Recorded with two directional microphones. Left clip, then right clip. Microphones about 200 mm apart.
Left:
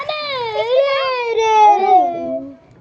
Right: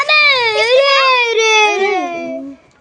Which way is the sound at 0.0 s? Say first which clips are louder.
Right 11 dB; 55° right (ahead or behind).